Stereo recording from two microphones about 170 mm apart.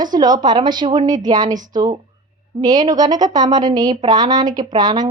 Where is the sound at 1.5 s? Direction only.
50° right (ahead or behind).